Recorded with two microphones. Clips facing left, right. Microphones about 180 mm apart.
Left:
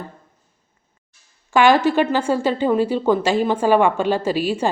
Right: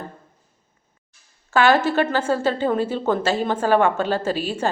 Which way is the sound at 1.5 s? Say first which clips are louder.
Left 3 dB; 15° left (ahead or behind).